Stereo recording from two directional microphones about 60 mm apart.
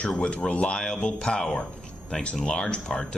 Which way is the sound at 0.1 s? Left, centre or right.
Centre.